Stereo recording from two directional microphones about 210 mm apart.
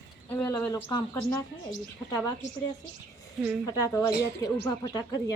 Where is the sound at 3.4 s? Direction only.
10° right (ahead or behind).